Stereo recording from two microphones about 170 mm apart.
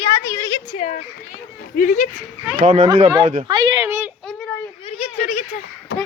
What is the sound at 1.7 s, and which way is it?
Speech, 55° left (ahead or behind).